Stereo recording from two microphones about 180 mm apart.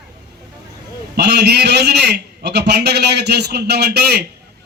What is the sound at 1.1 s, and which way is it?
A man's voice, 65° right (ahead or behind).